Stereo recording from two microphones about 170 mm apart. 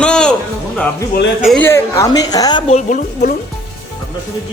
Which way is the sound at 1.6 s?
15° left (ahead or behind).